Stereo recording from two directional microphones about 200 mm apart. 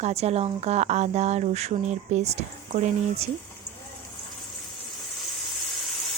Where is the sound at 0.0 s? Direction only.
30° right (ahead or behind).